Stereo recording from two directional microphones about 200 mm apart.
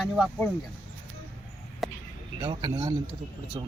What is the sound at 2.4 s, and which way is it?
Speech, 25° right (ahead or behind).